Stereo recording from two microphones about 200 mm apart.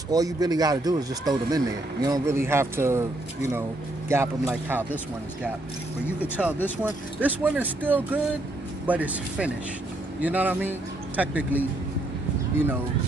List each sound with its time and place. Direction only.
0.1 s a man's voice: 20° right (ahead or behind)
4.1 s speech: 10° right (ahead or behind)
6.4 s speech: centre (ahead or behind)